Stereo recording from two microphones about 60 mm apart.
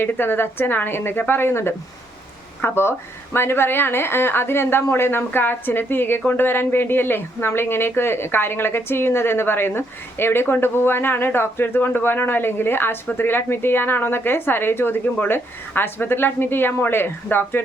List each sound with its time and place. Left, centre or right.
0.0 s a woman's voice: left